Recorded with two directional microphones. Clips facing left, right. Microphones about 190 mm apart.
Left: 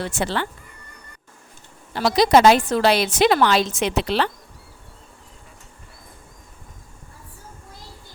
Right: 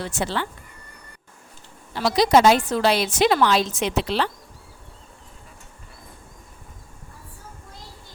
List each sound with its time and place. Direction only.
0.0 s a woman's voice: 70° left (ahead or behind)
2.0 s a woman's voice: 75° left (ahead or behind)